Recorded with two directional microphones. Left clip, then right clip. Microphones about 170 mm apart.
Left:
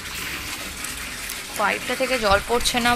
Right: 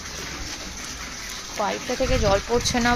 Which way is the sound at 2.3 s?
25° right (ahead or behind).